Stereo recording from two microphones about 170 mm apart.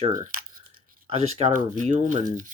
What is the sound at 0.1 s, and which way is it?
Speech, 50° right (ahead or behind).